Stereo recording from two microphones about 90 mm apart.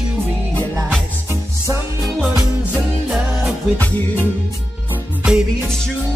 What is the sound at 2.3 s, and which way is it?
Music, 10° right (ahead or behind).